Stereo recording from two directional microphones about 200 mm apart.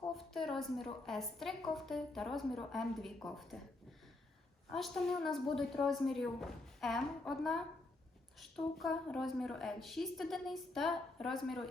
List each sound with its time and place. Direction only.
0.1 s a woman's voice: centre (ahead or behind)
4.7 s a woman's voice: centre (ahead or behind)